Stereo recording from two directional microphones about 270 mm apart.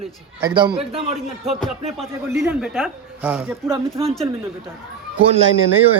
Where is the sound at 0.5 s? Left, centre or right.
Centre.